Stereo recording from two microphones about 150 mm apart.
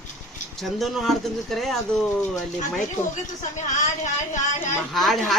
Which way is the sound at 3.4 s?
55° left (ahead or behind).